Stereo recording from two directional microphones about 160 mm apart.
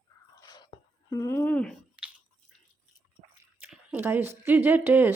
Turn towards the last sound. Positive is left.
turn(degrees=-10)  # may be behind; listen again after turning